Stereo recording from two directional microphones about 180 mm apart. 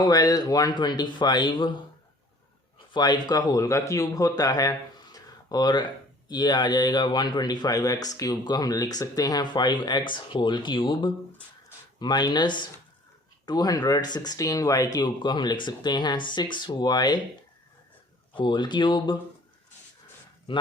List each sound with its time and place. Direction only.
0.0 s speech: 20° left (ahead or behind)
2.9 s speech: 25° left (ahead or behind)
5.1 s a sound: 20° left (ahead or behind)
6.2 s speech: 25° left (ahead or behind)
18.3 s speech: 25° left (ahead or behind)
20.5 s speech: 25° left (ahead or behind)